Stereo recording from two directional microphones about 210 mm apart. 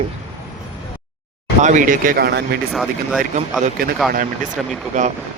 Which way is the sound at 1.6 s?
35° right (ahead or behind).